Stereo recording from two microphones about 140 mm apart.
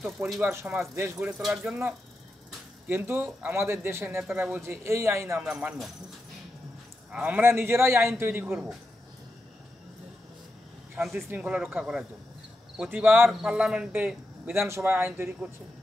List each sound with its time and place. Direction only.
0.4 s speech: 15° right (ahead or behind)
1.1 s a man's voice: 5° right (ahead or behind)
5.4 s speech: 10° right (ahead or behind)
7.1 s speech: 10° right (ahead or behind)
8.5 s speech: 5° right (ahead or behind)
11.0 s speech: 5° right (ahead or behind)